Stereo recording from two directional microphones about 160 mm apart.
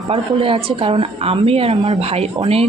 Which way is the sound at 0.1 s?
35° right (ahead or behind).